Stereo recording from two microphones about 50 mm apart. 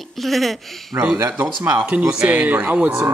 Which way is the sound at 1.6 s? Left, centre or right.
Right.